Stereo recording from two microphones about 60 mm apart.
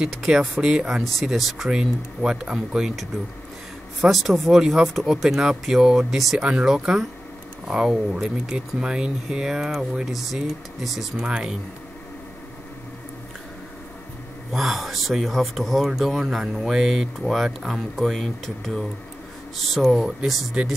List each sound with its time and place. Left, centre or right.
0.1 s speech: centre
1.7 s speech: centre
4.0 s speech: centre
11.1 s speech: centre
14.5 s speech: centre
19.8 s speech: centre